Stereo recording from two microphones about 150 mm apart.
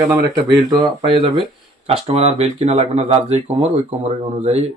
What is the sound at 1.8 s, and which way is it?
Speech, 45° right (ahead or behind).